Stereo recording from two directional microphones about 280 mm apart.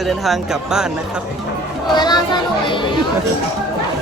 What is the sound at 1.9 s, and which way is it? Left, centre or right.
Speech, centre.